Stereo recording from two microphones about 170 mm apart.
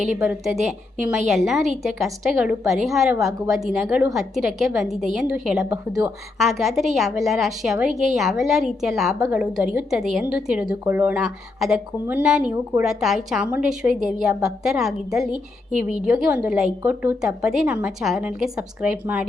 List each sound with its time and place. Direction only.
0.3 s a woman's voice: centre (ahead or behind)
5.6 s a woman's voice: 20° right (ahead or behind)
6.4 s a woman's voice: centre (ahead or behind)